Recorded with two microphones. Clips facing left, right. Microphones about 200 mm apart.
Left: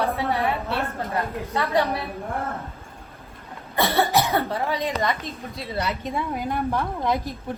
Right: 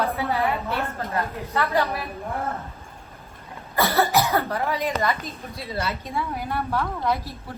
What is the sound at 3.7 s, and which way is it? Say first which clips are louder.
Cough: even; 25° left (ahead or behind).